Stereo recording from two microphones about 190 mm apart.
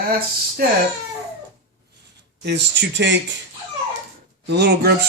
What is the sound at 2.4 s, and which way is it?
Speech, 65° right (ahead or behind).